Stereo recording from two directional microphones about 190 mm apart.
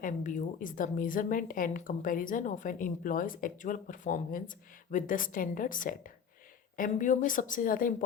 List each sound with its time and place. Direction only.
0.0 s a woman's voice: 45° left (ahead or behind)